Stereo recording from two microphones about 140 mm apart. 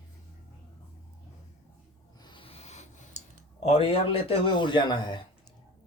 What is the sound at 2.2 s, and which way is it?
Rub, 40° left (ahead or behind).